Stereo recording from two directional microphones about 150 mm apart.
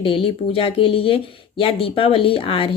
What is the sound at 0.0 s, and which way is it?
Speech, 40° left (ahead or behind).